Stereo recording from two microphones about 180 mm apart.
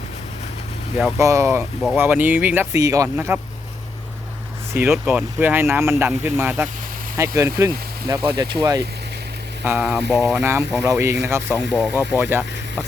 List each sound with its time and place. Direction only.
1.2 s speech: 15° right (ahead or behind)
4.7 s speech: 5° right (ahead or behind)
9.6 s speech: 5° right (ahead or behind)
11.7 s speech: 10° left (ahead or behind)
11.9 s speech: 10° right (ahead or behind)